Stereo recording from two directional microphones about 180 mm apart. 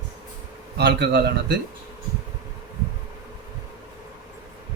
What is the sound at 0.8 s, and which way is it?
Speech, 65° right (ahead or behind).